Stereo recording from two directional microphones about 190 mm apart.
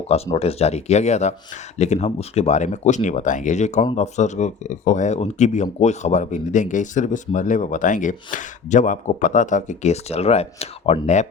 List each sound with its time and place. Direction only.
0.3 s speech: 35° left (ahead or behind)